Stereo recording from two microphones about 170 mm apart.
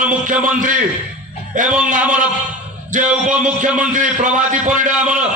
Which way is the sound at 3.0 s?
5° right (ahead or behind).